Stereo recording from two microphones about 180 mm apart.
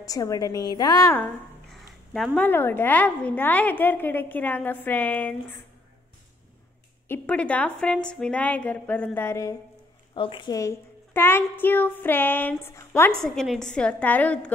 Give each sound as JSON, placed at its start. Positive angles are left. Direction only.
{"t": 0.0, "sound": "a woman's voice", "side_deg": 20}
{"t": 1.1, "sound": "a sound", "side_deg": 5}
{"t": 2.3, "sound": "a child's voice", "side_deg": 10}
{"t": 7.1, "sound": "a child's voice", "side_deg": 5}
{"t": 10.1, "sound": "a child's voice", "side_deg": 30}
{"t": 13.1, "sound": "a woman's voice", "side_deg": 0}